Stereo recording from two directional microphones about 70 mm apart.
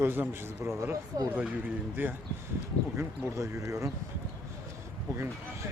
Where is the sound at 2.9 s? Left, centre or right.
Right.